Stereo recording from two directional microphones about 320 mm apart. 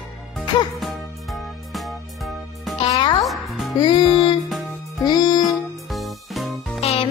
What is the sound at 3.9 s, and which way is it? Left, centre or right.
Music, centre.